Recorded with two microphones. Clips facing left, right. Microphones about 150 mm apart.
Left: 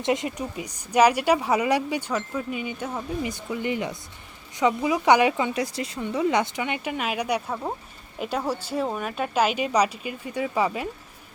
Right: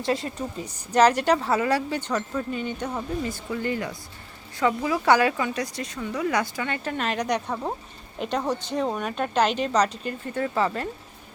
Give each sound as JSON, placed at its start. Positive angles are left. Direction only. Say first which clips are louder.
{"t": 0.0, "sound": "speech", "louder": "left 1 dB", "side_deg": 20}
{"t": 3.2, "sound": "speech", "louder": "even", "side_deg": 15}